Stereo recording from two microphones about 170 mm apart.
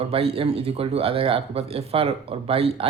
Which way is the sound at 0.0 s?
35° right (ahead or behind).